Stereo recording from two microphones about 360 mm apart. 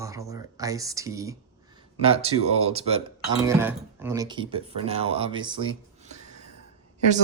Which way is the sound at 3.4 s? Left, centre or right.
Centre.